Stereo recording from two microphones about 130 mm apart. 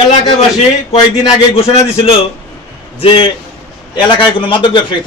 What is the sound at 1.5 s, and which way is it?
A man's voice, 50° left (ahead or behind).